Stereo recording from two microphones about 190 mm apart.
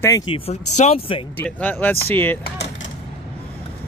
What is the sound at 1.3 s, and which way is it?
Speech, 10° left (ahead or behind).